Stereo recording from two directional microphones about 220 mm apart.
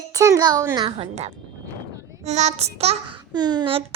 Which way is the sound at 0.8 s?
30° right (ahead or behind).